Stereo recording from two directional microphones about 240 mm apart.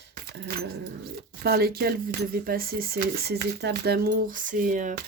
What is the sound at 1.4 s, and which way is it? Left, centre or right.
Speech, right.